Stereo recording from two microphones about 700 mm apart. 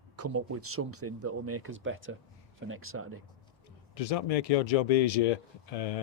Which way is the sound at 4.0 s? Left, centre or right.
Left.